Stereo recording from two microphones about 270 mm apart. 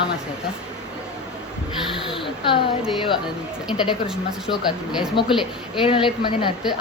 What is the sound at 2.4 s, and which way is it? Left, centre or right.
Speech, centre.